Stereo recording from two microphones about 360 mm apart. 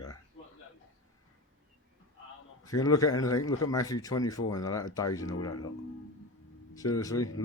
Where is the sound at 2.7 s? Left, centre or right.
Centre.